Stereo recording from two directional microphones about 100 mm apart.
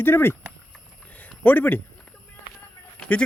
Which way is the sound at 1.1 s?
15° left (ahead or behind).